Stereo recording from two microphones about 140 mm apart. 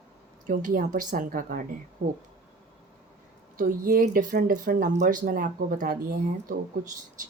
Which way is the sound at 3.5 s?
85° right.